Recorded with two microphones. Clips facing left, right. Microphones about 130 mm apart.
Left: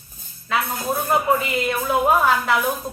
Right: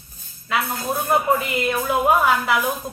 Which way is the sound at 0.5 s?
Centre (ahead or behind).